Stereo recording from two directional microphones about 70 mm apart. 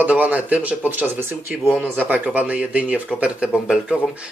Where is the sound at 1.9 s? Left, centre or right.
Right.